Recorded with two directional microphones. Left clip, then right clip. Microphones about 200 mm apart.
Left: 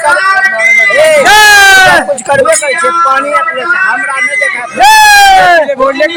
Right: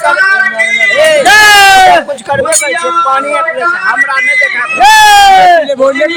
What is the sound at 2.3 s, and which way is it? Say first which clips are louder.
Speech: left 4 dB; 5° left (ahead or behind).